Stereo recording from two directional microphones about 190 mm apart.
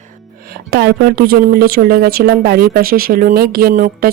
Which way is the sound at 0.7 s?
55° right (ahead or behind).